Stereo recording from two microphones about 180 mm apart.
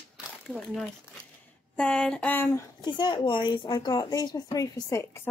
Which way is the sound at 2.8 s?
25° left (ahead or behind).